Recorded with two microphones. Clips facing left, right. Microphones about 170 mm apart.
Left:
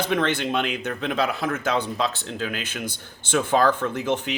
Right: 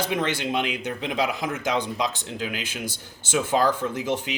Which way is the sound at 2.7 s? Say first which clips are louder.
Left 1 dB; 55° left (ahead or behind).